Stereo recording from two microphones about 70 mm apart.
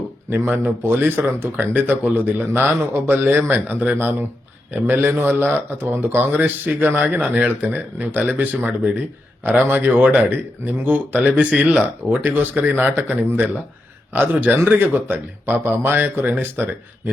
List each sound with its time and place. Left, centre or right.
0.3 s a man's voice: right
11.2 s a man's voice: centre